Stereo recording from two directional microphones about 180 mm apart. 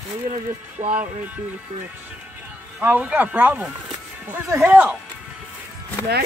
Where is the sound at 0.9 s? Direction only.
10° right (ahead or behind).